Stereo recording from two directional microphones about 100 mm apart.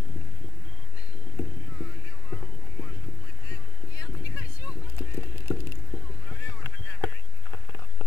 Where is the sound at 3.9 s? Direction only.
35° left (ahead or behind).